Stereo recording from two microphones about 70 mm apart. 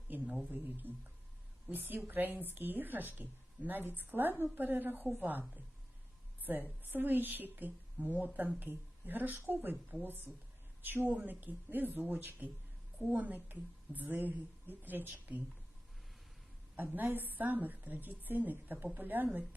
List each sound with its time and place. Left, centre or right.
0.8 s speech: left
1.7 s a woman's voice: right
16.7 s a woman's voice: right